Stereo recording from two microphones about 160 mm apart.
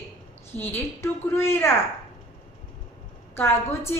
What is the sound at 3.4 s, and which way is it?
Speech, 15° left (ahead or behind).